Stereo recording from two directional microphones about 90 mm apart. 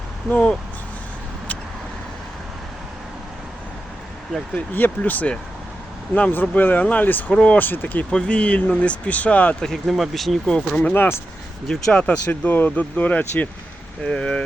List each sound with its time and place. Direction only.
0.3 s speech: 15° left (ahead or behind)
4.5 s speech: 20° left (ahead or behind)
9.6 s speech: 5° left (ahead or behind)
10.9 s speech: 25° left (ahead or behind)
11.7 s speech: 10° left (ahead or behind)